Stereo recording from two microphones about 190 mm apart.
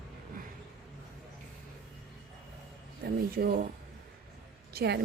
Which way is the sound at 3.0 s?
55° right (ahead or behind).